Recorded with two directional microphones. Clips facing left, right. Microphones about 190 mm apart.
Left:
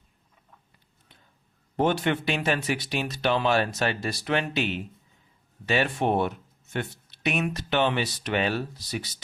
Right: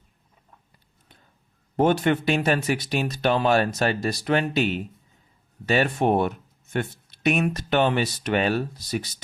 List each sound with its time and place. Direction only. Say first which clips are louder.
1.7 s speech: right 4 dB; 45° right (ahead or behind)